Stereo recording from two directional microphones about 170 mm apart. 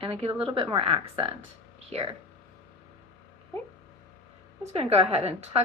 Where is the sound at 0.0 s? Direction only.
35° right (ahead or behind).